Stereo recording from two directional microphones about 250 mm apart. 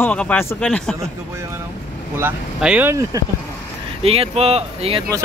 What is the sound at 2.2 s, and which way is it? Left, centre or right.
Speech, centre.